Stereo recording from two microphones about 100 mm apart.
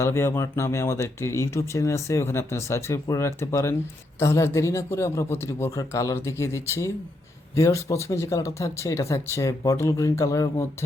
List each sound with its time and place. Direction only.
0.0 s speech: 30° left (ahead or behind)